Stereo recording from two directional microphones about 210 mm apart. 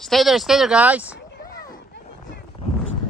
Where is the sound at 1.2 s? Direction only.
50° left (ahead or behind).